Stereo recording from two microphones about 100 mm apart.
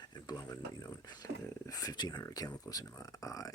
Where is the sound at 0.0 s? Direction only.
45° left (ahead or behind).